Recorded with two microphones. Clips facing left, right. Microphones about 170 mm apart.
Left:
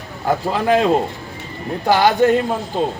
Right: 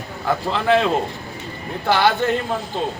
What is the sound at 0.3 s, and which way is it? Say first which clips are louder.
Speech: left 2 dB; 40° left (ahead or behind).